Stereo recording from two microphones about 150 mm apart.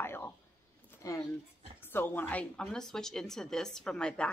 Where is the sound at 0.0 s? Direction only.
15° left (ahead or behind).